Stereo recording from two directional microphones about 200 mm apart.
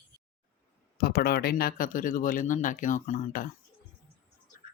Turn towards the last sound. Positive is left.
turn(degrees=40)  # may be behind; listen again after turning